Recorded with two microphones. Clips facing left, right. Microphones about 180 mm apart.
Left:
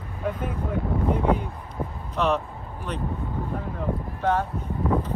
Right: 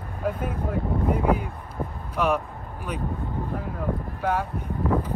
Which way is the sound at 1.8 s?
5° left (ahead or behind).